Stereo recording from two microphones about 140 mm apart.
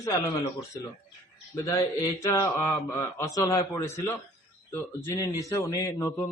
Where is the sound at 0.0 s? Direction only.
25° left (ahead or behind).